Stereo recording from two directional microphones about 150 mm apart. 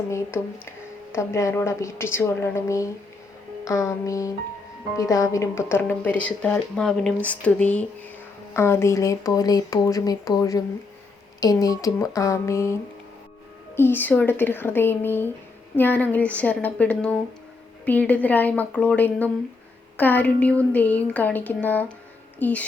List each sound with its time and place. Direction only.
0.1 s speech: 15° left (ahead or behind)
13.7 s speech: 15° left (ahead or behind)